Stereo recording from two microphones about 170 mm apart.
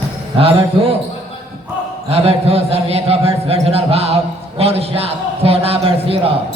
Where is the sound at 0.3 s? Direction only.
35° right (ahead or behind).